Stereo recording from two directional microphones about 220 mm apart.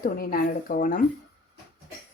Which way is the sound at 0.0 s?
40° left (ahead or behind).